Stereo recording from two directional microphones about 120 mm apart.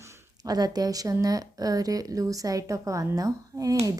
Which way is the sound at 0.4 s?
35° right (ahead or behind).